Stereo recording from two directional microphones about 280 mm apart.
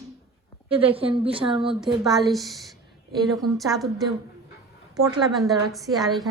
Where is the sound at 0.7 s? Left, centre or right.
Centre.